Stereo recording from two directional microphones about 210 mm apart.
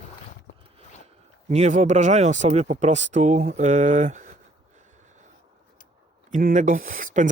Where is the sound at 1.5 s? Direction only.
30° right (ahead or behind).